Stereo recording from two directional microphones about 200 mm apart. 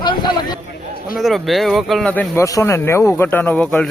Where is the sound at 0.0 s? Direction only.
25° left (ahead or behind).